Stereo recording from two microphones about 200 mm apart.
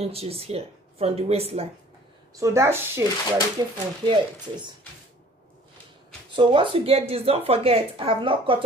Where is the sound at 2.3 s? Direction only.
15° right (ahead or behind).